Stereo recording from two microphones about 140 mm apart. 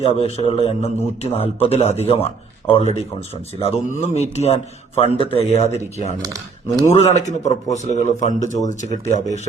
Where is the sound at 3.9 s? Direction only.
55° left (ahead or behind).